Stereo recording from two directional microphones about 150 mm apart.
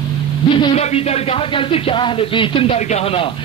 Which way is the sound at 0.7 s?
45° left (ahead or behind).